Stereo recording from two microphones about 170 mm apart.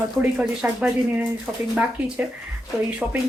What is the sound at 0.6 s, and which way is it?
Speech, 10° right (ahead or behind).